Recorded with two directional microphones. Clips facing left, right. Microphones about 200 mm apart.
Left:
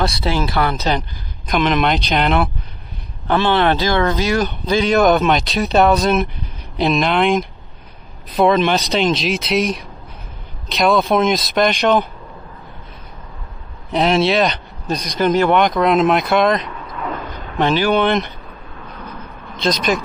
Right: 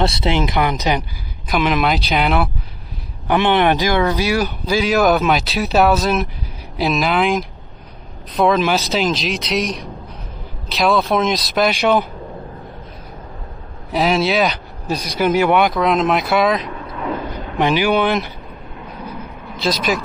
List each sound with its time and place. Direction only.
0.0 s speech: 20° right (ahead or behind); by 2.5 s 5° right (ahead or behind)
3.3 s speech: 15° right (ahead or behind)
13.8 s speech: centre (ahead or behind)
15.7 s speech: centre (ahead or behind)
17.6 s speech: 15° right (ahead or behind)
19.0 s vehicle: 5° right (ahead or behind)